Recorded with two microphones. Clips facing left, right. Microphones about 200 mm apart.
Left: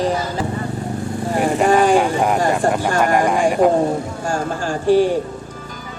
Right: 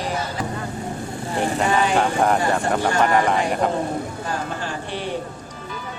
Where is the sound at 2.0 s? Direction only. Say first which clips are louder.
Left 3 dB; 10° left (ahead or behind).